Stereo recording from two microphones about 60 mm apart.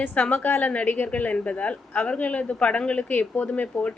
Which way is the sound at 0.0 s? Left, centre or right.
Left.